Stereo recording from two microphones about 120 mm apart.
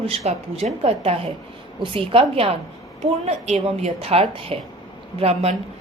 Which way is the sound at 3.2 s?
65° right (ahead or behind).